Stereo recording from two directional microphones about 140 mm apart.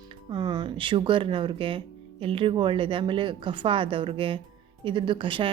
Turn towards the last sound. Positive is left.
turn(degrees=-40)  # may be behind; listen again after turning